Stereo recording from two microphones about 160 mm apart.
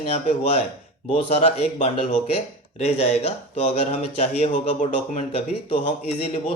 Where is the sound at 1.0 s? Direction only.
40° left (ahead or behind).